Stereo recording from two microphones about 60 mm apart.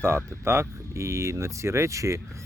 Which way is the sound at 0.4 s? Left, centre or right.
Right.